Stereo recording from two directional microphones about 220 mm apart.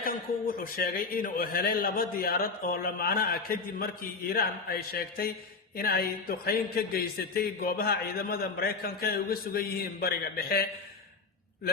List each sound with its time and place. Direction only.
0.0 s a man's voice: 40° left (ahead or behind)